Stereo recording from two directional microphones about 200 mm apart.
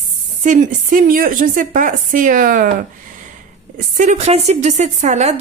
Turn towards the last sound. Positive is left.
turn(degrees=-35)  # may be behind; listen again after turning